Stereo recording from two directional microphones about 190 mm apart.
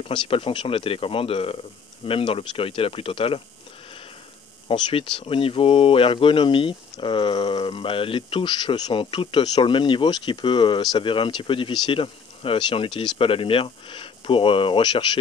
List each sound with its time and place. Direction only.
0.0 s speech: 25° left (ahead or behind)
4.6 s speech: 25° left (ahead or behind)